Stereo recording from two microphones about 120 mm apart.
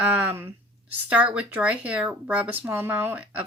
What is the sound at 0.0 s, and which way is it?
Speech, 15° right (ahead or behind).